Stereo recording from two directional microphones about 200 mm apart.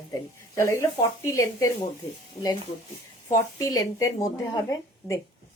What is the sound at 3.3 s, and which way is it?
A woman's voice, 15° left (ahead or behind).